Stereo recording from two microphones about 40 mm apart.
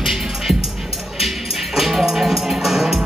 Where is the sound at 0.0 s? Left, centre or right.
Centre.